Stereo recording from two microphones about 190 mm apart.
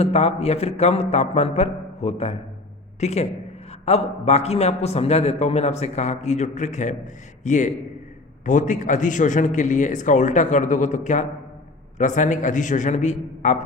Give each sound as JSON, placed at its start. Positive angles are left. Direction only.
{"t": 0.0, "sound": "a man's voice", "side_deg": 35}